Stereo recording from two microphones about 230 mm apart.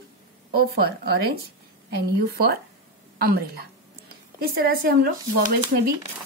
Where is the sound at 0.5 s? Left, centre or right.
Right.